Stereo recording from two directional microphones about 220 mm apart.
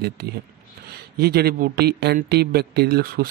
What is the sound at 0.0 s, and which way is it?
Speech, 45° right (ahead or behind).